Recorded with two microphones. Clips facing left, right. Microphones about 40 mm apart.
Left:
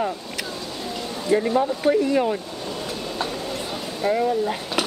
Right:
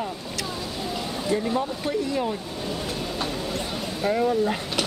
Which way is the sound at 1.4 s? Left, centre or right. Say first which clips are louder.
Left 5 dB; centre.